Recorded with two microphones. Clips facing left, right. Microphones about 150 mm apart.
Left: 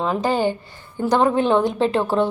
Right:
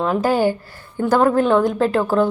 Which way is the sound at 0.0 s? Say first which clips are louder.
Right 3 dB; 5° right (ahead or behind).